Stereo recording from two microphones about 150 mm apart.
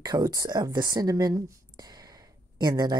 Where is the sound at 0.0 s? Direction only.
25° right (ahead or behind).